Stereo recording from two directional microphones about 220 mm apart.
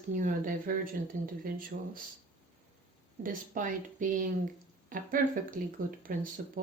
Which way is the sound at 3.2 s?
40° right (ahead or behind).